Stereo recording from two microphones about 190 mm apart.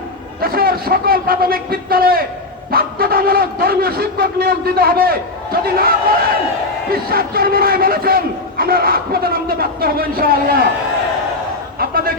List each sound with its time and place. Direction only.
0.4 s a man's voice: 50° right (ahead or behind)
6.9 s a man's voice: 50° right (ahead or behind)
11.8 s a man's voice: 50° right (ahead or behind)